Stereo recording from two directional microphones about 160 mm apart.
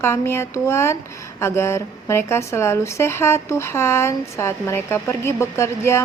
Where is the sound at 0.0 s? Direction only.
15° left (ahead or behind).